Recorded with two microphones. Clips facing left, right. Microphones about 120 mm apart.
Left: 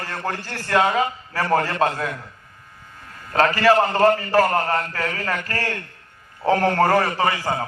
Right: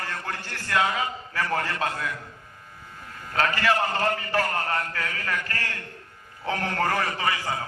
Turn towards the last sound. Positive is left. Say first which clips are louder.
# left 6 dB
turn(degrees=40)  # may be behind; listen again after turning